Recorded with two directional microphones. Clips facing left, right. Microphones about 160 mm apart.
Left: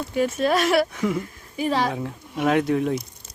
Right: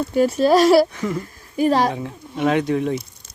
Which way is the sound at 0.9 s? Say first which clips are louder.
Even; 5° left (ahead or behind).